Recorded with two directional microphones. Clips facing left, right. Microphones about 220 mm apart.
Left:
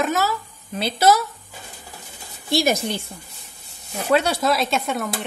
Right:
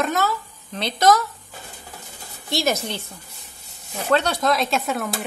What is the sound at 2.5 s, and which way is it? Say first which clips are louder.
A woman's voice: left 3 dB; 15° left (ahead or behind).